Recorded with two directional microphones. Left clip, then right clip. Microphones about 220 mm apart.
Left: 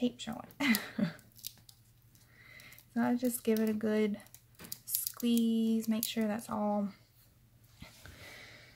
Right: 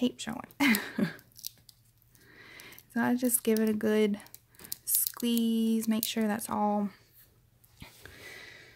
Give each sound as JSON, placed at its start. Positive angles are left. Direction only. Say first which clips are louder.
{"t": 0.0, "sound": "speech", "louder": "right 4 dB", "side_deg": -45}
{"t": 2.3, "sound": "speech", "louder": "right 5 dB", "side_deg": -45}
{"t": 5.4, "sound": "speech", "louder": "right 3 dB", "side_deg": -45}
{"t": 7.8, "sound": "a sound", "louder": "right 4 dB", "side_deg": -40}